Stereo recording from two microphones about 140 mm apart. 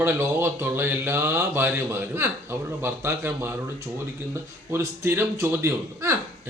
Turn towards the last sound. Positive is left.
turn(degrees=-20)  # may be behind; listen again after turning